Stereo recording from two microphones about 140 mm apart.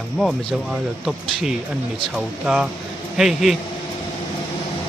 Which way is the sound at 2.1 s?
5° right (ahead or behind).